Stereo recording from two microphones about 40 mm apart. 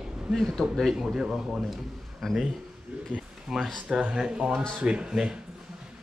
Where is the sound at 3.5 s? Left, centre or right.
Centre.